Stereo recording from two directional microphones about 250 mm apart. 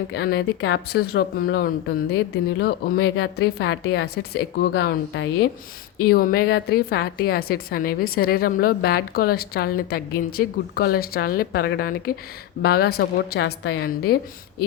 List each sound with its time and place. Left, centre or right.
0.1 s a woman's voice: left